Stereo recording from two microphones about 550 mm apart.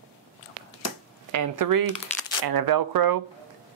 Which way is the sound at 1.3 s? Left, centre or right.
Right.